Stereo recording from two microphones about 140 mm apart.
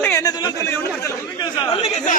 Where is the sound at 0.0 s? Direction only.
20° left (ahead or behind).